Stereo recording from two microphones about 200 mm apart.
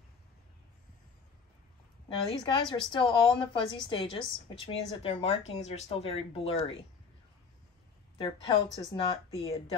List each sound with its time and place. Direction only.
2.0 s speech: 25° left (ahead or behind)
8.2 s speech: 25° left (ahead or behind)